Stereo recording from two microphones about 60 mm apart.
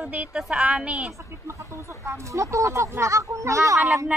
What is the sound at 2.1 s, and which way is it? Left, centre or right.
Speech, right.